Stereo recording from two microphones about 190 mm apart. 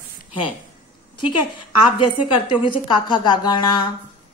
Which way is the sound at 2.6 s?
25° left (ahead or behind).